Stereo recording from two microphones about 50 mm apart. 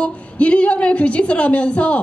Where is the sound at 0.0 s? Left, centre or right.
Left.